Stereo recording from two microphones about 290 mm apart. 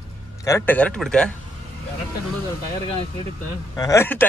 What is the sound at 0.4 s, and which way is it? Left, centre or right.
Speech, centre.